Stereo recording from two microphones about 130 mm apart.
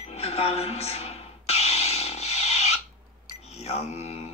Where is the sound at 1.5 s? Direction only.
55° left (ahead or behind).